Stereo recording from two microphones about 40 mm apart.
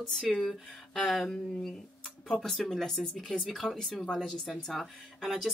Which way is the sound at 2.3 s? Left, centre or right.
Centre.